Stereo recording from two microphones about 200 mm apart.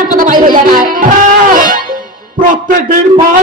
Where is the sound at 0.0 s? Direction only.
40° right (ahead or behind).